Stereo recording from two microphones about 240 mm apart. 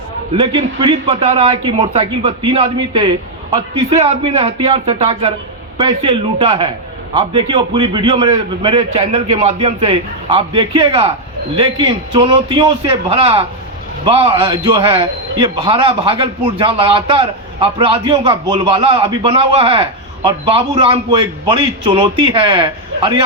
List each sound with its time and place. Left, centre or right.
0.3 s a man's voice: centre